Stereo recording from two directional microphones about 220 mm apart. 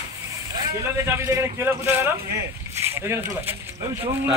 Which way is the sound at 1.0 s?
10° right (ahead or behind).